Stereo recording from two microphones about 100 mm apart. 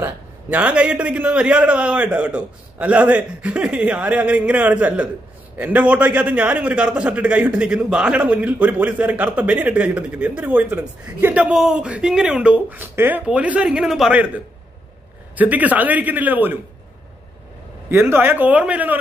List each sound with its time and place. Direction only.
0.0 s a man's voice: 15° right (ahead or behind)
13.2 s a man's voice: 15° right (ahead or behind)
15.3 s a man's voice: 15° right (ahead or behind)
17.8 s a man's voice: 20° right (ahead or behind)